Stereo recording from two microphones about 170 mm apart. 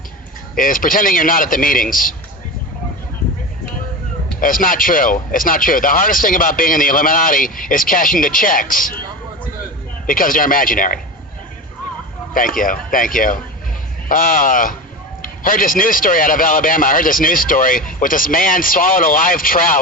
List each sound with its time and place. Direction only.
0.5 s a man's voice: 55° left (ahead or behind)
4.4 s a man's voice: 55° left (ahead or behind)
10.1 s a man's voice: 55° left (ahead or behind)
12.3 s a man's voice: 55° left (ahead or behind)